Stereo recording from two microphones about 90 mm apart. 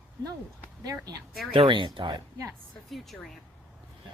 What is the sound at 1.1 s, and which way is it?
Speech, 45° right (ahead or behind).